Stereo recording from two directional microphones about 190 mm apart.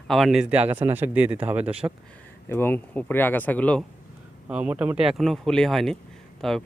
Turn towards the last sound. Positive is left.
turn(degrees=0)  # may be behind; listen again after turning